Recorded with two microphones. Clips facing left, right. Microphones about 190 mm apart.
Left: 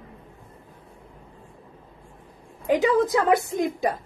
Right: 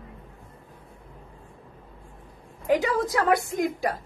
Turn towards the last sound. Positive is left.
turn(degrees=20)  # may be behind; listen again after turning